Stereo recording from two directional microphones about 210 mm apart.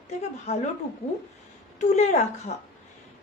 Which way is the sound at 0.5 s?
30° left (ahead or behind).